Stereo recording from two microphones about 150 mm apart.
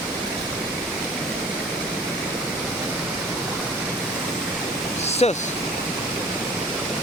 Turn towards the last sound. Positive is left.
turn(degrees=45)  # may be behind; listen again after turning